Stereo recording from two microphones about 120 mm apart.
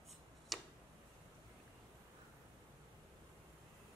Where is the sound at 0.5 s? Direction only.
Centre (ahead or behind).